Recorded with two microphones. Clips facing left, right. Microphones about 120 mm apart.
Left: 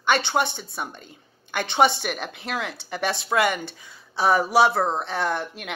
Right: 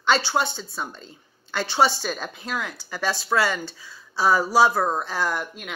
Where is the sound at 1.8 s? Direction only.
60° left (ahead or behind).